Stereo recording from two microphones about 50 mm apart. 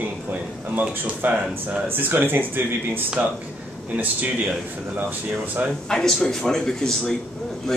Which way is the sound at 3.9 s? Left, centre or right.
Right.